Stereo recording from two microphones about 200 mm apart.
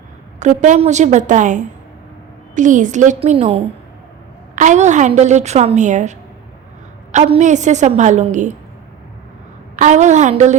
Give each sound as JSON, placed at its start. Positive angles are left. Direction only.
{"t": 0.3, "sound": "a woman's voice", "side_deg": -35}
{"t": 9.7, "sound": "a woman's voice", "side_deg": -35}